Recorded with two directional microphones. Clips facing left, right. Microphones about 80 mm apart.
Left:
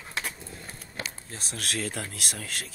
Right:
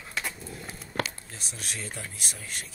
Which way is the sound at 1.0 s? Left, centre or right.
Right.